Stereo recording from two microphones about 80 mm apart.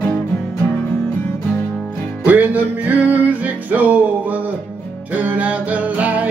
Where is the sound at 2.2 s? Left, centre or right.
Centre.